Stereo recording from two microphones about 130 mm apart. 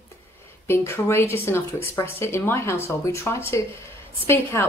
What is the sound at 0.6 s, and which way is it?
Speech, 20° left (ahead or behind).